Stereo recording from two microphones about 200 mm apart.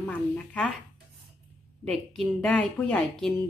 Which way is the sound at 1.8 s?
5° left (ahead or behind).